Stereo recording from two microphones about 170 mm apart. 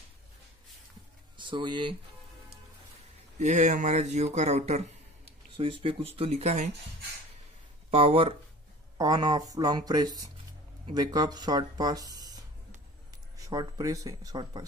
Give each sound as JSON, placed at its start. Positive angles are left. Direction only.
{"t": 1.4, "sound": "speech", "side_deg": -30}
{"t": 3.3, "sound": "speech", "side_deg": -45}
{"t": 7.9, "sound": "speech", "side_deg": -35}
{"t": 8.9, "sound": "speech", "side_deg": -20}